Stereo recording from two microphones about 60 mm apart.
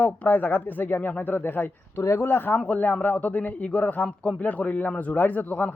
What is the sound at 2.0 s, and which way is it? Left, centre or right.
Speech, left.